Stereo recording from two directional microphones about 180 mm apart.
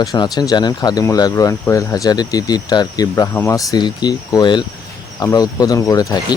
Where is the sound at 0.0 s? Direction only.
20° left (ahead or behind).